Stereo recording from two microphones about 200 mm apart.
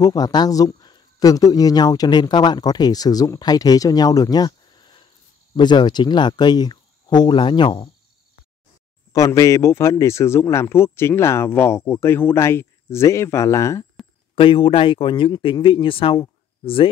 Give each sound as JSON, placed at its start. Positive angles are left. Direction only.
{"t": 0.0, "sound": "speech", "side_deg": 20}
{"t": 9.1, "sound": "speech", "side_deg": 15}
{"t": 14.3, "sound": "speech", "side_deg": 25}